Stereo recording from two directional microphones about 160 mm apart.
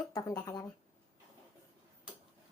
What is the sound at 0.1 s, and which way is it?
Speech, 25° left (ahead or behind).